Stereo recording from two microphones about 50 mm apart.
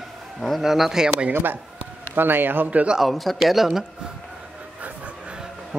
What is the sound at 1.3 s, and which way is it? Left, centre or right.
A man's voice, right.